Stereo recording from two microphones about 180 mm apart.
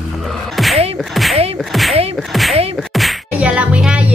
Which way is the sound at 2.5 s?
35° right (ahead or behind).